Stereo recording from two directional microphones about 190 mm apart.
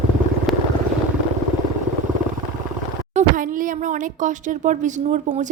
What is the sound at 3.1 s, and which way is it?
Speech, 45° right (ahead or behind).